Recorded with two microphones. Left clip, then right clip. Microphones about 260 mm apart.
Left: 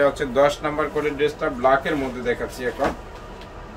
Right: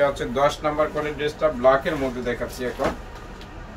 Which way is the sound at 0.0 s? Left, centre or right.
Centre.